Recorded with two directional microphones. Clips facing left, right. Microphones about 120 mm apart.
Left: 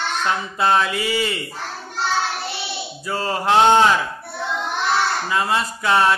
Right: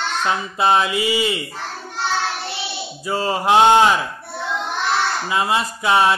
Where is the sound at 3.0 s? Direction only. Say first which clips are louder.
Right 2 dB; 15° right (ahead or behind).